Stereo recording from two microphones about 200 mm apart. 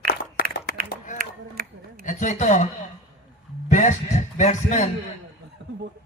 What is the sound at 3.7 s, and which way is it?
Speech, 40° left (ahead or behind).